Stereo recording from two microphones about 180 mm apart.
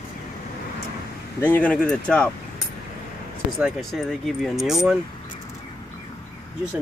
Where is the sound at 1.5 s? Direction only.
5° left (ahead or behind).